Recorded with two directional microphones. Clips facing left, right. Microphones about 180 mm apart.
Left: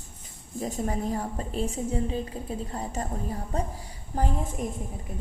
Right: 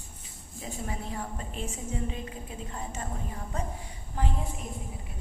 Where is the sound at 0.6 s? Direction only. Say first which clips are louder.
Left 8 dB; 40° left (ahead or behind).